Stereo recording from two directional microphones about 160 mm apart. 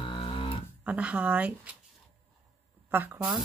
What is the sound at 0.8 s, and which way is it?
Speech, 10° right (ahead or behind).